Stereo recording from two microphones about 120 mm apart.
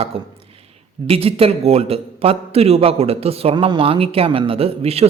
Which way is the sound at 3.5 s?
45° right (ahead or behind).